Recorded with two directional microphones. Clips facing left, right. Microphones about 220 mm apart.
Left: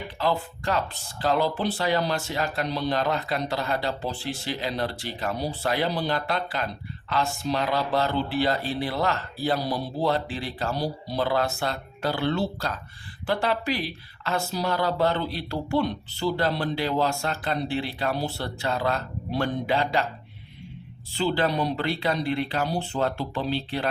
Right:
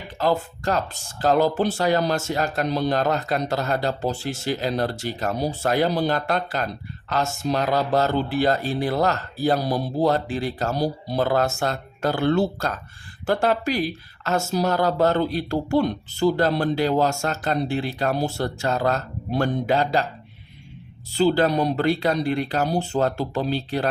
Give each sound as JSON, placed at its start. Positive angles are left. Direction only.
{"t": 0.2, "sound": "speech", "side_deg": -40}
{"t": 21.1, "sound": "speech", "side_deg": -40}